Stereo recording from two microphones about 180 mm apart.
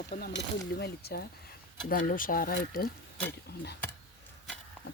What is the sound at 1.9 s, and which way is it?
Speech, 50° left (ahead or behind).